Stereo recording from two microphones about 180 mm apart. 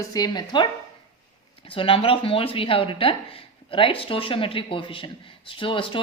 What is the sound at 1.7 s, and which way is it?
Speech, 30° left (ahead or behind).